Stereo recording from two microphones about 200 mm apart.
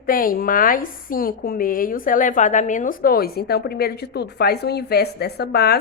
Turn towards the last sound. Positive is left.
turn(degrees=55)  # may be behind; listen again after turning